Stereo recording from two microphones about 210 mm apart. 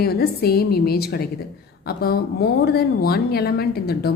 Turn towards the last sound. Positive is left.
turn(degrees=50)  # may be behind; listen again after turning